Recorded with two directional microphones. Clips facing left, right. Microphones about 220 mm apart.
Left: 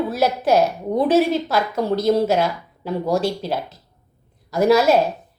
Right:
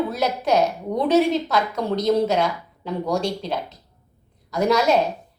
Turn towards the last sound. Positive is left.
turn(degrees=5)  # may be behind; listen again after turning